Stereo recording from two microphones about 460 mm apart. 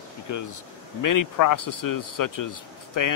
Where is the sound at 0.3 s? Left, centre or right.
Left.